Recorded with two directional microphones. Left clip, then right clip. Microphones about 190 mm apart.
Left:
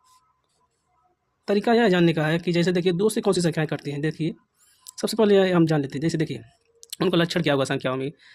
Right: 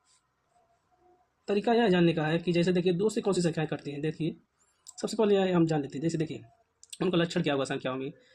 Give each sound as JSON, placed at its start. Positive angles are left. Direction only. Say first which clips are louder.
{"t": 1.5, "sound": "speech", "louder": "left 6 dB", "side_deg": 55}